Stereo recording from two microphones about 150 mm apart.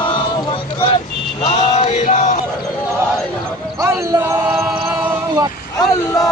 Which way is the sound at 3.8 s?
25° right (ahead or behind).